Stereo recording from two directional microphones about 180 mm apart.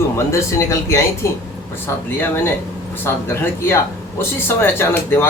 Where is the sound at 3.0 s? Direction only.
15° left (ahead or behind).